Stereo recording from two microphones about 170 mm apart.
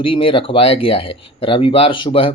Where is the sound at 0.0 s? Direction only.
30° left (ahead or behind).